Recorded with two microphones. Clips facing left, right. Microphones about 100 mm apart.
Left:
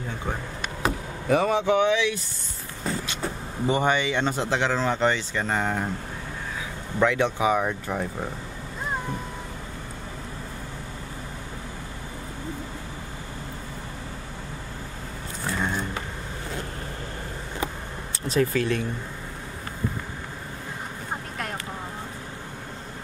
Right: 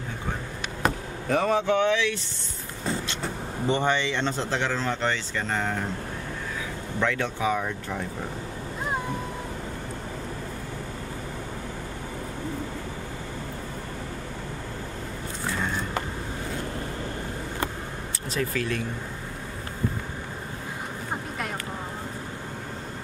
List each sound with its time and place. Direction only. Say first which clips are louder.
0.8 s speech: left 2 dB; 5° left (ahead or behind)
3.6 s speech: left 2 dB; 10° left (ahead or behind)
7.0 s speech: left 5 dB; 15° left (ahead or behind)
18.4 s speech: left 5 dB; 30° left (ahead or behind)